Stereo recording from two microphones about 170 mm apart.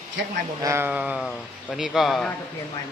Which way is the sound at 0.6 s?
15° right (ahead or behind).